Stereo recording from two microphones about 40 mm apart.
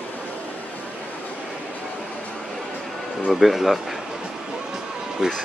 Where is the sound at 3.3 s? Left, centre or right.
Centre.